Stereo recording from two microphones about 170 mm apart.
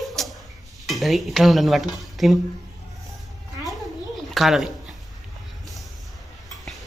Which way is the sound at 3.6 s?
Centre (ahead or behind).